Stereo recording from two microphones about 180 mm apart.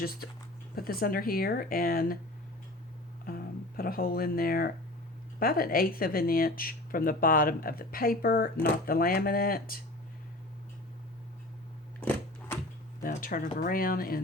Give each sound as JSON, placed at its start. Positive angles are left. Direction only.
{"t": 0.8, "sound": "speech", "side_deg": 55}
{"t": 3.2, "sound": "speech", "side_deg": 55}
{"t": 11.9, "sound": "sewing machine", "side_deg": 10}
{"t": 13.2, "sound": "speech", "side_deg": 50}